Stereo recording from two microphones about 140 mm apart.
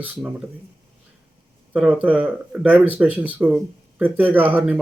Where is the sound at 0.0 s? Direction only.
10° right (ahead or behind).